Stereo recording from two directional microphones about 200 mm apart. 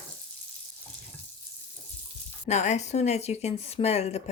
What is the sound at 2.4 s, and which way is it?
Speech, 35° left (ahead or behind).